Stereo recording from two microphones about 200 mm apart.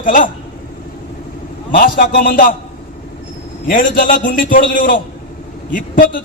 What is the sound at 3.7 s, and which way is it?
A man's voice, 45° left (ahead or behind).